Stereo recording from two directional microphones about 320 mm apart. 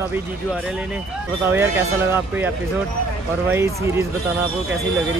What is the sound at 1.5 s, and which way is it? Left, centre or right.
Speech, centre.